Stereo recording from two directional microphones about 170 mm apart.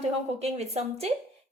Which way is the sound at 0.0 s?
40° right (ahead or behind).